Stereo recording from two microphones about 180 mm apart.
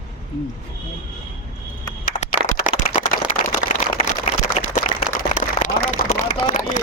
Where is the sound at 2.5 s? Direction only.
50° left (ahead or behind).